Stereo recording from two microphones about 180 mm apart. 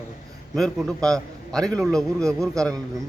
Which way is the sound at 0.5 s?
Centre (ahead or behind).